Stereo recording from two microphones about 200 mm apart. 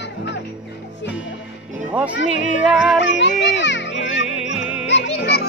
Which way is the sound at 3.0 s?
60° left (ahead or behind).